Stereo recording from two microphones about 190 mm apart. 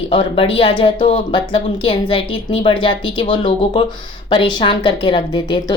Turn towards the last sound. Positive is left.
turn(degrees=25)  # may be behind; listen again after turning